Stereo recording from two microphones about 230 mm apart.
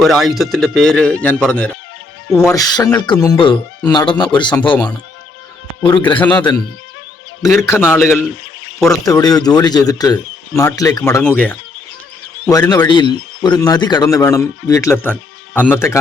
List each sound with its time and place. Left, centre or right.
0.0 s speech: centre
2.5 s speech: centre
6.0 s speech: centre
6.3 s speech: centre